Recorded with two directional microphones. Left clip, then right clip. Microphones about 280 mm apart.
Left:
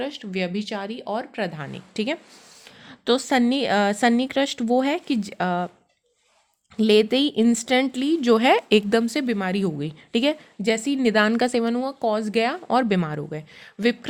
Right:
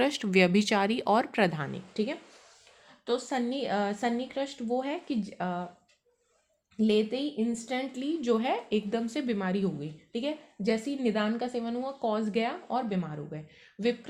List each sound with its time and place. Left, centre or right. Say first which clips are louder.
0.0 s speech: right 3 dB; centre
1.9 s speech: left 7 dB; left
3.0 s a woman's voice: left 10 dB; left
6.7 s a woman's voice: left 10 dB; left
9.8 s a woman's voice: left 11 dB; left
10.7 s a woman's voice: left 8 dB; left
12.6 s speech: left 11 dB; left